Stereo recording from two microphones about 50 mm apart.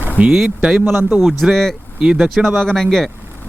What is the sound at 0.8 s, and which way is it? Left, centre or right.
Speech, right.